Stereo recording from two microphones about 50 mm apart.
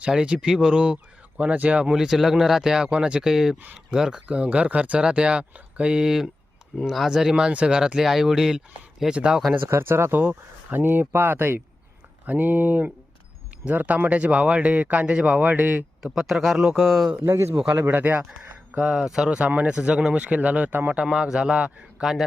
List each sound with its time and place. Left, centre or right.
0.0 s speech: centre
1.8 s speech: centre
5.9 s speech: centre
9.6 s speech: right
10.2 s speech: right
10.8 s speech: right
16.1 s speech: centre
17.3 s speech: right
17.9 s speech: right
18.8 s speech: centre
19.4 s speech: right
20.9 s speech: centre